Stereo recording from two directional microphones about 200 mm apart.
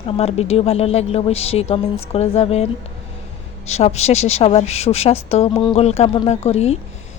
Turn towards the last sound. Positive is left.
turn(degrees=30)  # may be behind; listen again after turning